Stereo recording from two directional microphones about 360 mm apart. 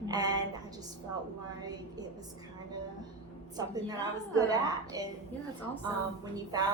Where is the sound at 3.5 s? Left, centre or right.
Centre.